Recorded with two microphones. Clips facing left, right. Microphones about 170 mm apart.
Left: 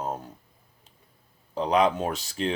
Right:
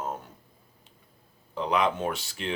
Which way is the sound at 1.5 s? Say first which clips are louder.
Left 4 dB; 35° left (ahead or behind).